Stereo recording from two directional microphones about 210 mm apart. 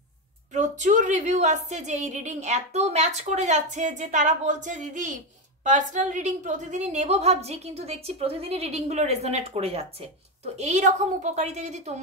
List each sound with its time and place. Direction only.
0.5 s a woman's voice: 35° right (ahead or behind)